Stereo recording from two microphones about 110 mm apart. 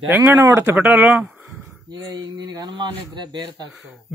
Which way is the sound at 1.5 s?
20° right (ahead or behind).